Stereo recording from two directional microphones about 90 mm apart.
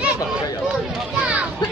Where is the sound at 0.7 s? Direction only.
10° right (ahead or behind).